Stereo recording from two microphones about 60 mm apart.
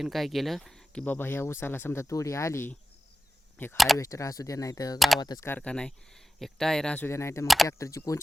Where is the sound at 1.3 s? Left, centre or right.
Left.